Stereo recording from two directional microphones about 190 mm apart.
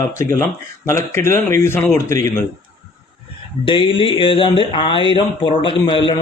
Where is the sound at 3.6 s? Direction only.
25° left (ahead or behind).